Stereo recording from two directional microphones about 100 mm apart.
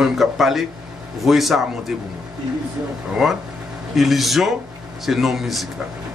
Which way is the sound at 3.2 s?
Centre (ahead or behind).